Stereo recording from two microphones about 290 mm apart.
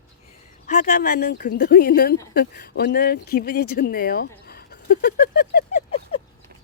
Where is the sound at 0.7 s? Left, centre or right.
Left.